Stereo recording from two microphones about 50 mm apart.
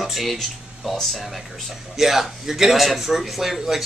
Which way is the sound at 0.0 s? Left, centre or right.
Centre.